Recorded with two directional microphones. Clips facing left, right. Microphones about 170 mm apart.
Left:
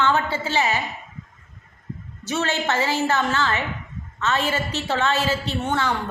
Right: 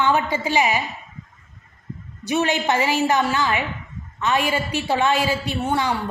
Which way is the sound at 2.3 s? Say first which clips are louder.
Right 3 dB; 15° right (ahead or behind).